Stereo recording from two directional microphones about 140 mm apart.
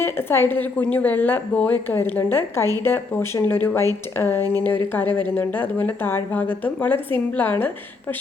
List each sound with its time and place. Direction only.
0.0 s speech: 15° left (ahead or behind)